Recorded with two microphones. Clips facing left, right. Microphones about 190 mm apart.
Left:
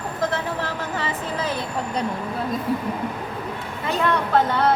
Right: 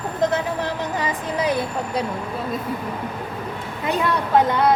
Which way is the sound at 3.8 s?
15° right (ahead or behind).